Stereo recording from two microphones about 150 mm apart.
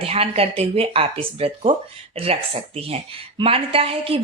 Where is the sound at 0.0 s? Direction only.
40° right (ahead or behind).